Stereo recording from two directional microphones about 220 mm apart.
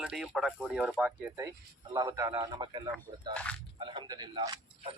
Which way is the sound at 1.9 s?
15° right (ahead or behind).